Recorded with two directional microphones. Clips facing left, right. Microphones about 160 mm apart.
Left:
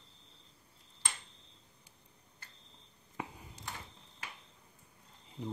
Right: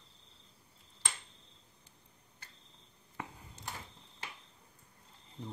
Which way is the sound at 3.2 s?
15° left (ahead or behind).